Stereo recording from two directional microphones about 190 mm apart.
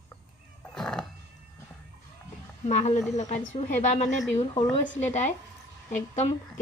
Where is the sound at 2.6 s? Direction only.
40° left (ahead or behind).